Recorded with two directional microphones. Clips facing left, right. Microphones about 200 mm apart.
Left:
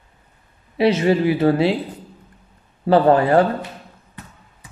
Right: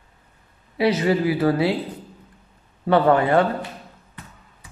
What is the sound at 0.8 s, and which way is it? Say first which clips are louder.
Speech: left 3 dB; 25° left (ahead or behind).